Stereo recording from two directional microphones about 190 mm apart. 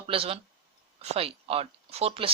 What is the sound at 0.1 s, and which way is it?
Speech, 30° right (ahead or behind).